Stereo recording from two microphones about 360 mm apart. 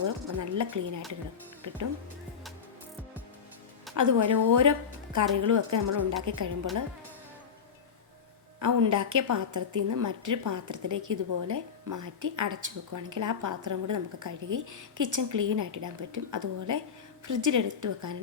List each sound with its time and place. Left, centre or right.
0.3 s a woman's voice: right
3.9 s a woman's voice: right
8.5 s a woman's voice: right